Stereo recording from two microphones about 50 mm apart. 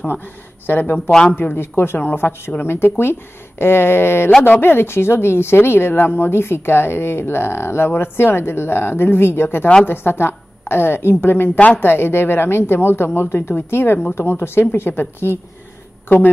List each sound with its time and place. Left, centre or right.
0.1 s a woman's voice: left